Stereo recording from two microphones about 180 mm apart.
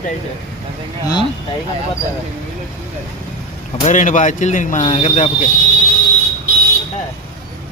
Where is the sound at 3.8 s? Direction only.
45° left (ahead or behind).